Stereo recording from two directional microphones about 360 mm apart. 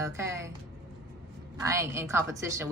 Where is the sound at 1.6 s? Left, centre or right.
Centre.